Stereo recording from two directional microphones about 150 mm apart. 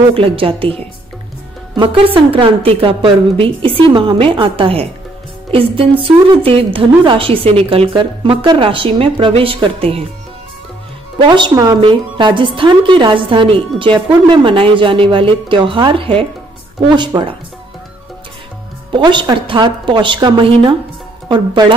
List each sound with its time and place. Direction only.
0.1 s a woman's voice: 35° right (ahead or behind)
1.8 s a woman's voice: 35° right (ahead or behind)
11.1 s a woman's voice: 30° right (ahead or behind)
18.9 s a woman's voice: 30° right (ahead or behind)